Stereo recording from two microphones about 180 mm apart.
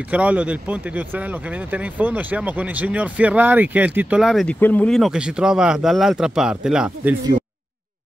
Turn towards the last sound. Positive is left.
turn(degrees=-5)  # may be behind; listen again after turning